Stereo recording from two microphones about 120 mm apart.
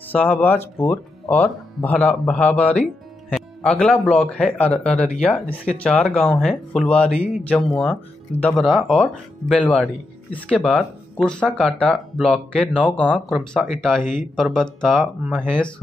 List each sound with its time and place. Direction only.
0.4 s speech: 15° left (ahead or behind)
6.4 s speech: centre (ahead or behind)
8.5 s speech: centre (ahead or behind)
14.0 s speech: 90° left
14.3 s speech: 5° left (ahead or behind)